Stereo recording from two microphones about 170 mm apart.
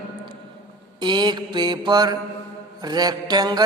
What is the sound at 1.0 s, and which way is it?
Mantra, 25° right (ahead or behind).